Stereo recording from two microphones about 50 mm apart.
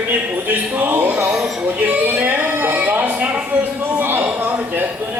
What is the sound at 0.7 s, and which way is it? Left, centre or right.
Speech, right.